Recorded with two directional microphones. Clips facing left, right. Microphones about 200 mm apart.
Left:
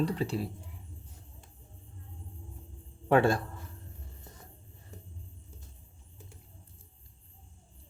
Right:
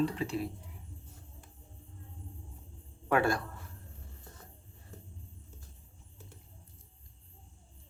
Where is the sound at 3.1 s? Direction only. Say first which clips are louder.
Left 4 dB; 30° left (ahead or behind).